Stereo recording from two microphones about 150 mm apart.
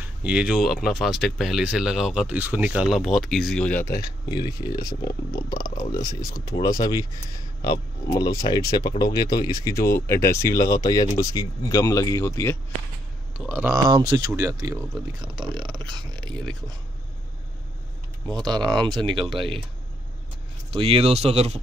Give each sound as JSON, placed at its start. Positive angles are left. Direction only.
{"t": 0.0, "sound": "speech", "side_deg": -10}
{"t": 4.3, "sound": "speech", "side_deg": 25}
{"t": 8.4, "sound": "speech", "side_deg": 25}
{"t": 13.4, "sound": "speech", "side_deg": -10}
{"t": 13.7, "sound": "speech", "side_deg": -30}
{"t": 18.3, "sound": "speech", "side_deg": -30}
{"t": 20.7, "sound": "speech", "side_deg": -40}